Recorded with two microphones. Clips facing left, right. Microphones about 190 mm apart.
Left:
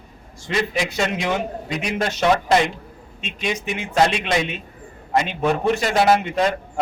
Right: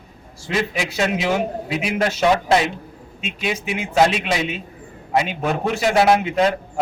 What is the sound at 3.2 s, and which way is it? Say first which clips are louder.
A man's voice: right 1 dB; 5° right (ahead or behind).